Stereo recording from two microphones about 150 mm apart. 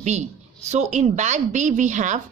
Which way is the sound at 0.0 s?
50° right (ahead or behind).